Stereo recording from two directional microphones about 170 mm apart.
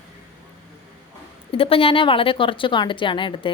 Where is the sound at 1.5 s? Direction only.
35° left (ahead or behind).